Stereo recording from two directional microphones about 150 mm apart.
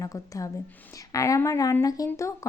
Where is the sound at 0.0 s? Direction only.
20° left (ahead or behind).